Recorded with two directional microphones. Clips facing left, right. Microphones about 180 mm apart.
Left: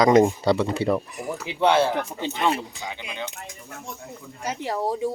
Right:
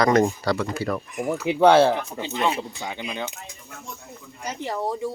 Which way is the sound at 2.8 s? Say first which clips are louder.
Right 3 dB; 50° right (ahead or behind).